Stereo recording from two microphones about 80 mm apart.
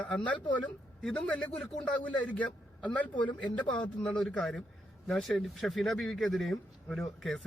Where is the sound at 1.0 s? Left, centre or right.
Centre.